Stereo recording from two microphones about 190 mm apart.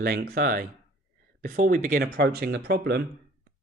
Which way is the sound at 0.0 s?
55° right (ahead or behind).